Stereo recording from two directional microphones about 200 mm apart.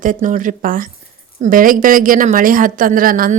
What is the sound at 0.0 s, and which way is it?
A woman's voice, 40° right (ahead or behind).